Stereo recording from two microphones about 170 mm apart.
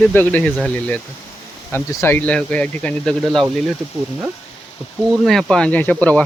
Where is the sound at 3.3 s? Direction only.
25° right (ahead or behind).